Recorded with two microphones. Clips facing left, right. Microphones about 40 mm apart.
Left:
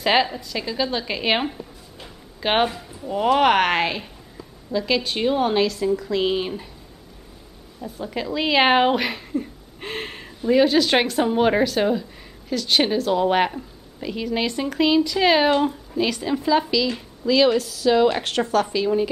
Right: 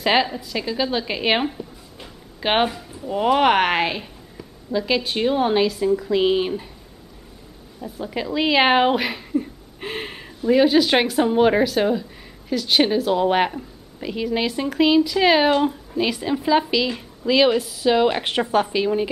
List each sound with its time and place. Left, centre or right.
0.0 s a woman's voice: centre
7.8 s speech: centre; by 18.9 s right